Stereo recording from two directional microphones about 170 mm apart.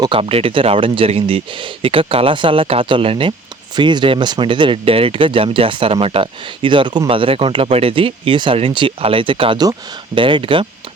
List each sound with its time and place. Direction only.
0.0 s speech: 30° right (ahead or behind)